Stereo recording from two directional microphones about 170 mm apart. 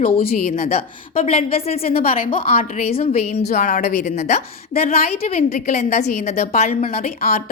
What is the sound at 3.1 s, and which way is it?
Speech, 70° left (ahead or behind).